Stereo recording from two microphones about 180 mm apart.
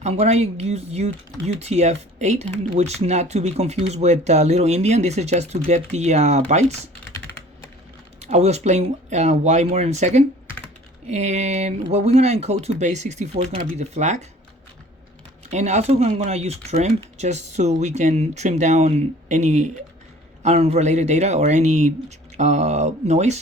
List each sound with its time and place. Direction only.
0.0 s speech: 35° right (ahead or behind)
8.2 s speech: 40° right (ahead or behind)
15.4 s speech: 40° right (ahead or behind)